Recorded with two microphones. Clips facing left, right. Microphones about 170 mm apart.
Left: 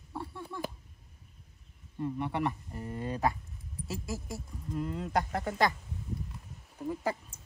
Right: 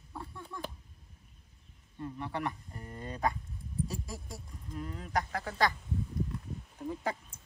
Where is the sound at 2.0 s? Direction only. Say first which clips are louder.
Left 5 dB; 25° left (ahead or behind).